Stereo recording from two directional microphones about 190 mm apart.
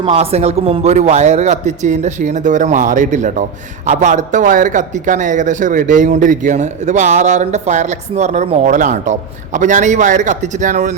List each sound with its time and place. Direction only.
0.0 s a man's voice: 30° right (ahead or behind)